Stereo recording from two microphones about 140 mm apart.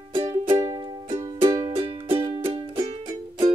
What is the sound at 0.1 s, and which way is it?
Music, 40° right (ahead or behind).